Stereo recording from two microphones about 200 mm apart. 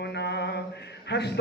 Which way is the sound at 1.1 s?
55° left (ahead or behind).